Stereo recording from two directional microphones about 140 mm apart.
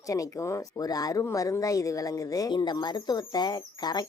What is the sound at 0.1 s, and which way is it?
Speech, 25° left (ahead or behind).